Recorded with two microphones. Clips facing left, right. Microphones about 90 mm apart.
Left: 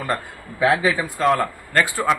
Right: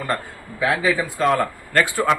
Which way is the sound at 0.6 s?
20° left (ahead or behind).